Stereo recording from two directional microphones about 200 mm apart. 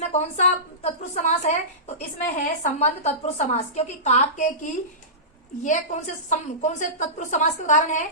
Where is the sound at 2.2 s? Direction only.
40° left (ahead or behind).